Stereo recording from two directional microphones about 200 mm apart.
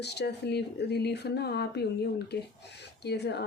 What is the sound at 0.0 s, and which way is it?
Speech, 55° left (ahead or behind).